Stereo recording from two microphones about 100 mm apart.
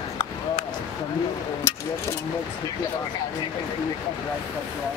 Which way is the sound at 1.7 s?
30° left (ahead or behind).